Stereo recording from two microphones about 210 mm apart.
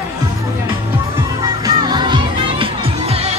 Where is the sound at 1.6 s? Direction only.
20° right (ahead or behind).